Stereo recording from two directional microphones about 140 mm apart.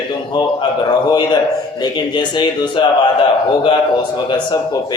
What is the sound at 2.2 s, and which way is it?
Speech, 35° left (ahead or behind).